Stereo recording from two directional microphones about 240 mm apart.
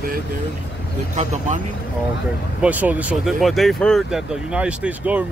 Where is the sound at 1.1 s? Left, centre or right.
Right.